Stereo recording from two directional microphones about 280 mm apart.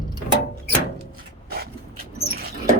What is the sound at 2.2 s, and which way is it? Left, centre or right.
Dog, right.